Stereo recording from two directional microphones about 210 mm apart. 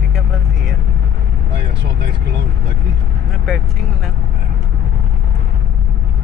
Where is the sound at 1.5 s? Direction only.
55° right (ahead or behind).